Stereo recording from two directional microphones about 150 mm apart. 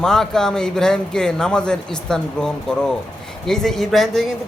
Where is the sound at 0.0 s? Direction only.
5° left (ahead or behind).